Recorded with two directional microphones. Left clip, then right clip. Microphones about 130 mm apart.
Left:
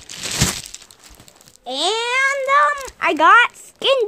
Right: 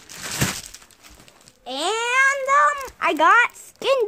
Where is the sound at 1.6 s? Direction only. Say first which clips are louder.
Left 3 dB; 40° left (ahead or behind).